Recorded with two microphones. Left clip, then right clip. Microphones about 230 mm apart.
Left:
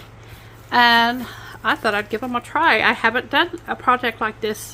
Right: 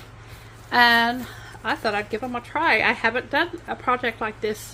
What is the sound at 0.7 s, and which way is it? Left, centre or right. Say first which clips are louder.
A woman's voice: left 3 dB; centre.